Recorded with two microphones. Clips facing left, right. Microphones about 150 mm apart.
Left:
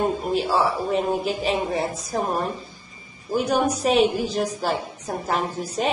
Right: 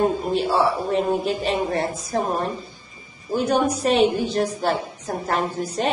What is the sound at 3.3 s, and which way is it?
A woman's voice, 5° left (ahead or behind).